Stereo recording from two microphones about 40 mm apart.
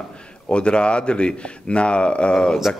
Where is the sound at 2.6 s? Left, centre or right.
Centre.